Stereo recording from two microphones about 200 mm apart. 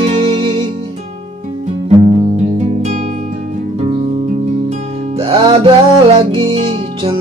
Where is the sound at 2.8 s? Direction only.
35° right (ahead or behind).